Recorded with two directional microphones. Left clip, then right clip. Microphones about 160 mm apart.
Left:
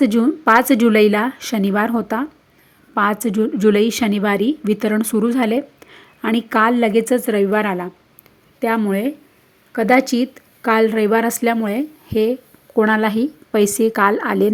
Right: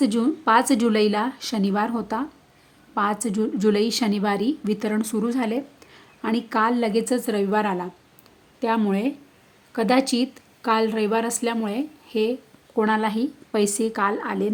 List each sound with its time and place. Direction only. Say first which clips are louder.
0.0 s a woman's voice: left 6 dB; 20° left (ahead or behind)
8.9 s a woman's voice: left 4 dB; 10° left (ahead or behind); by 14.5 s 25° left (ahead or behind)